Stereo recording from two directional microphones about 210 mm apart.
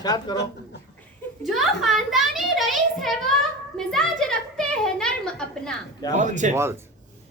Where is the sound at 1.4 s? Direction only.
Centre (ahead or behind).